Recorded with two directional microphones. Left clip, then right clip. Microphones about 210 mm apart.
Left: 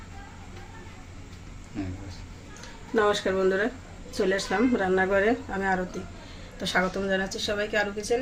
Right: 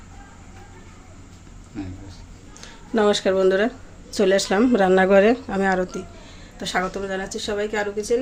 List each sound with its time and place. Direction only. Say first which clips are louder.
2.6 s speech: right 3 dB; 50° right (ahead or behind)